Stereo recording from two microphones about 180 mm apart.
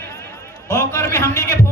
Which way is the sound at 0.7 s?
15° left (ahead or behind).